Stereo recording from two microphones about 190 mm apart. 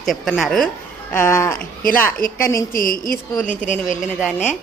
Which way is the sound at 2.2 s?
45° left (ahead or behind).